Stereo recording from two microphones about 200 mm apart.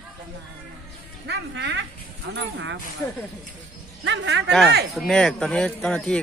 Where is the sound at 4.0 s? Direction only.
65° right (ahead or behind).